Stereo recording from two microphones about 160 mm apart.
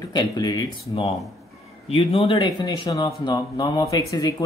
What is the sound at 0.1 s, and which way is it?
Speech, 25° left (ahead or behind).